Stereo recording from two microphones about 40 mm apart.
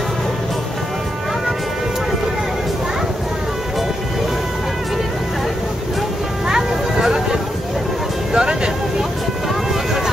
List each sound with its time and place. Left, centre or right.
6.4 s music: centre
8.3 s vehicle: centre